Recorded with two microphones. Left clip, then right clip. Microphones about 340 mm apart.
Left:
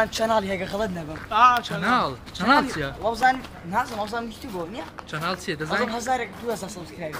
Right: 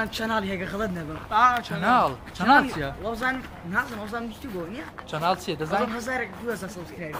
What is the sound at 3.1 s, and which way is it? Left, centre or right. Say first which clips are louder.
Speech: left 8 dB; centre.